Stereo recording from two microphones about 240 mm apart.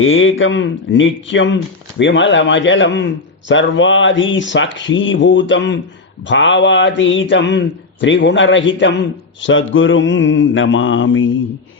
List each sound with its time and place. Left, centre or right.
0.0 s speech: left